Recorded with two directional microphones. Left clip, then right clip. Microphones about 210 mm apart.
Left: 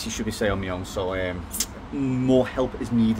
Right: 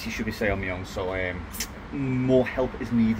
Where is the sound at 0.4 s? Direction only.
15° left (ahead or behind).